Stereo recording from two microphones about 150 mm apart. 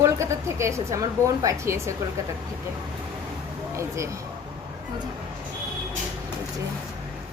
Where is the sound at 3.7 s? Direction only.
20° right (ahead or behind).